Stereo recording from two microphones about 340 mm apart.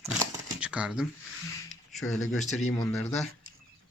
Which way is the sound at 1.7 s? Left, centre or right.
Centre.